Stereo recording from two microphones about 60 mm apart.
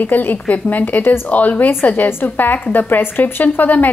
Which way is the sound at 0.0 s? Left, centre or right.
Left.